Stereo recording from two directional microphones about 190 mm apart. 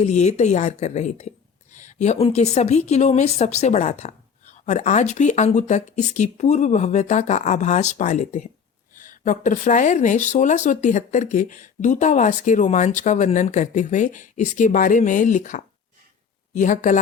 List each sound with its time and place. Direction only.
0.0 s a woman's voice: 35° left (ahead or behind)